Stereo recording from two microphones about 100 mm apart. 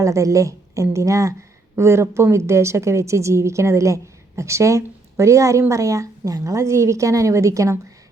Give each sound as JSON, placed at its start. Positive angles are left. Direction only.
{"t": 0.0, "sound": "a woman's voice", "side_deg": -30}